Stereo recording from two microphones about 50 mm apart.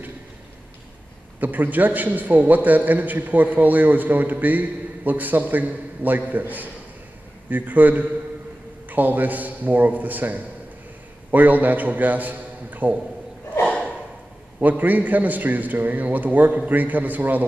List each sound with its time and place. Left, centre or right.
1.4 s a man's voice: right
13.7 s snort: centre
14.6 s a man's voice: right